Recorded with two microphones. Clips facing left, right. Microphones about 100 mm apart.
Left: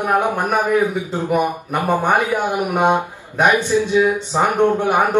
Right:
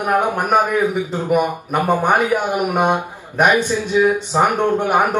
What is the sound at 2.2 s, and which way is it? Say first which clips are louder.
A man's voice: right 1 dB; 15° right (ahead or behind).